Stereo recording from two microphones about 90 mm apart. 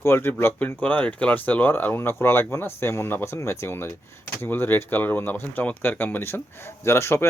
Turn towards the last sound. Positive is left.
turn(degrees=30)  # may be behind; listen again after turning